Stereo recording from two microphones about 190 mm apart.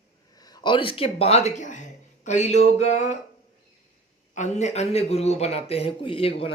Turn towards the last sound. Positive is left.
turn(degrees=30)  # may be behind; listen again after turning